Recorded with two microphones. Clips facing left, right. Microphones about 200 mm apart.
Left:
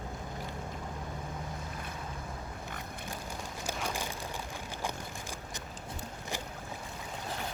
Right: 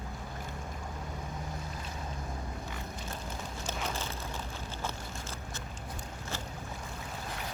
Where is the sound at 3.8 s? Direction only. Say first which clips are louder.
Left 1 dB; 15° left (ahead or behind).